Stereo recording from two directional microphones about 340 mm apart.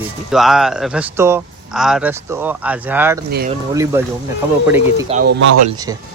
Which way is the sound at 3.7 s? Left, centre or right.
Centre.